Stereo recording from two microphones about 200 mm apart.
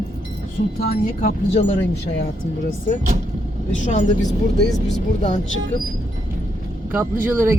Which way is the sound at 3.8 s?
35° left (ahead or behind).